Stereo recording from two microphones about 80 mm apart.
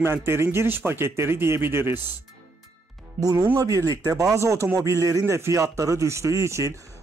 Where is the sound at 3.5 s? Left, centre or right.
Right.